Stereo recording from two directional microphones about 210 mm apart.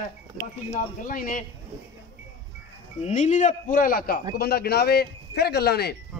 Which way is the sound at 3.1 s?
35° left (ahead or behind).